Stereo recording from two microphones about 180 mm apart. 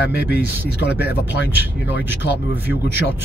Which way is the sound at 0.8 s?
65° left (ahead or behind).